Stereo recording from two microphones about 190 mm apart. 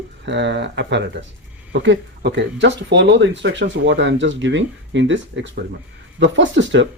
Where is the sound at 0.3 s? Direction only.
70° right (ahead or behind).